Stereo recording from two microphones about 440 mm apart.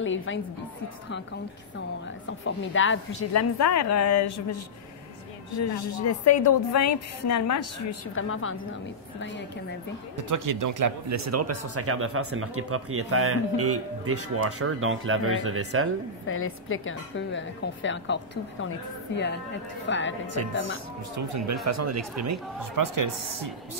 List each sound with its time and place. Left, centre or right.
0.0 s speech: left
2.4 s a woman's voice: left
6.0 s a woman's voice: left
10.1 s speech: right
16.3 s speech: left
20.3 s speech: right